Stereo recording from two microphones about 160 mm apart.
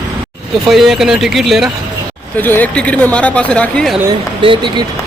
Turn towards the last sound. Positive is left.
turn(degrees=-30)  # may be behind; listen again after turning